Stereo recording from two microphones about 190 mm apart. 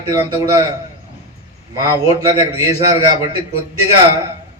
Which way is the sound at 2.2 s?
15° right (ahead or behind).